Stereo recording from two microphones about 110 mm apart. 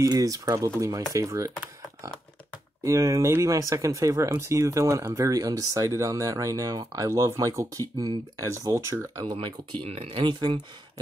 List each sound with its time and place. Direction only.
0.0 s speech: 30° right (ahead or behind)
2.8 s speech: 30° right (ahead or behind)
9.2 s speech: 45° right (ahead or behind)
9.8 s speech: 60° right (ahead or behind)